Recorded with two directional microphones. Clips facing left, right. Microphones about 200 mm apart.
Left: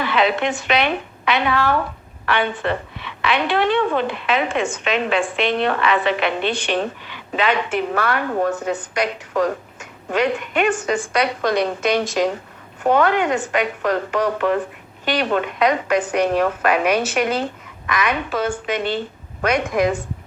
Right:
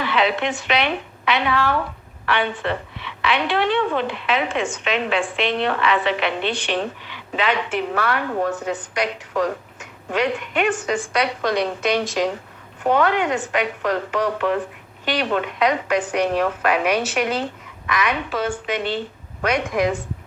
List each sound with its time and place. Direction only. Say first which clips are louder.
0.0 s a woman's voice: left 2 dB; 45° left (ahead or behind)